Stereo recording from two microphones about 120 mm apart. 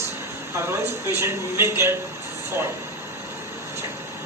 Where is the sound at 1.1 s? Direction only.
20° right (ahead or behind).